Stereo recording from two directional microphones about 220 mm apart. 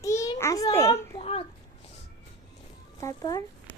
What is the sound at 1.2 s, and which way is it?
Speech, 25° left (ahead or behind).